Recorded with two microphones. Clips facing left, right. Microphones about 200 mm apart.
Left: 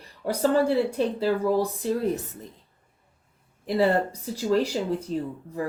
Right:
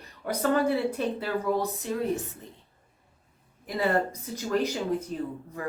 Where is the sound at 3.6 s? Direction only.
30° left (ahead or behind).